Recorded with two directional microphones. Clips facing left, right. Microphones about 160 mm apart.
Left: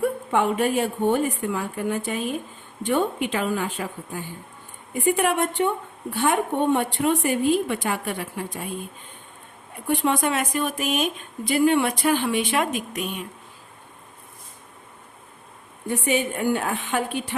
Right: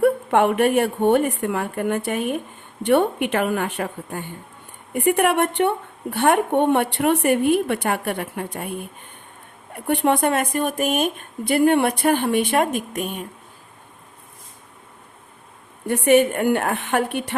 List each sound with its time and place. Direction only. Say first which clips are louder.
0.0 s a woman's voice: right 5 dB; 65° right (ahead or behind); by 13.2 s 50° right (ahead or behind)
15.9 s a woman's voice: right 8 dB; 65° right (ahead or behind)